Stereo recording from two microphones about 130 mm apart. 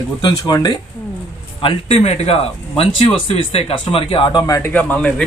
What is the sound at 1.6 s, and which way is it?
Speech, 50° left (ahead or behind).